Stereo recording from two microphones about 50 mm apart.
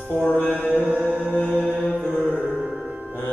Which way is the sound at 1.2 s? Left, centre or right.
Left.